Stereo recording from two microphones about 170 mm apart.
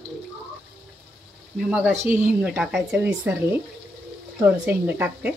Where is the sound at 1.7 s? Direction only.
10° right (ahead or behind).